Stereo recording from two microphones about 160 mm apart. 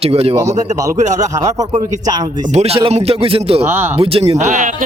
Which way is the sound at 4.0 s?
35° right (ahead or behind).